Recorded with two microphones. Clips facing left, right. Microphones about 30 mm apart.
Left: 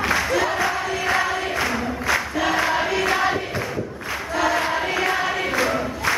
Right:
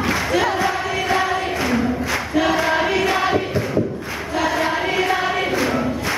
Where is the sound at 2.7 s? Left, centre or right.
Centre.